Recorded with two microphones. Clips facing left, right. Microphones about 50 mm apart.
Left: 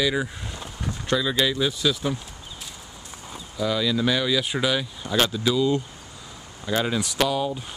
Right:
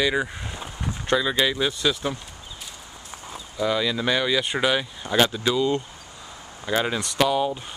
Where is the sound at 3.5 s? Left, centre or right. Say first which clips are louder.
Even; centre.